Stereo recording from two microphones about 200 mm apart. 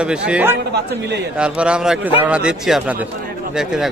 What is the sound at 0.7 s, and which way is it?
Speech, 55° right (ahead or behind).